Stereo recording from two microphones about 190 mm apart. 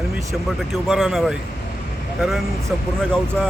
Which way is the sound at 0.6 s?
Centre (ahead or behind).